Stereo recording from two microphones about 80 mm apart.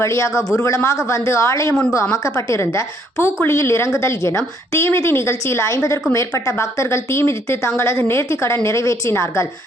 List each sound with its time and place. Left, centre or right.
0.0 s a woman's voice: left